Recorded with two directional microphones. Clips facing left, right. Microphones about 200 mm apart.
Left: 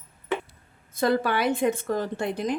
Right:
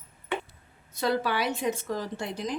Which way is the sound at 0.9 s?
50° left (ahead or behind).